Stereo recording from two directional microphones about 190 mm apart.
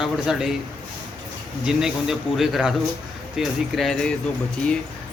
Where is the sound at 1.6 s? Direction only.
5° right (ahead or behind).